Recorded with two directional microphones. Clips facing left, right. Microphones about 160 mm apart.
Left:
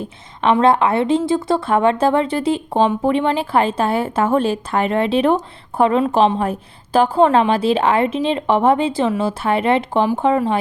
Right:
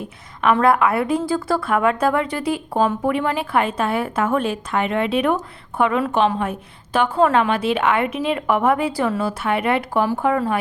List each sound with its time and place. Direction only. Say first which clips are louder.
0.6 s a woman's voice: left 3 dB; 25° left (ahead or behind)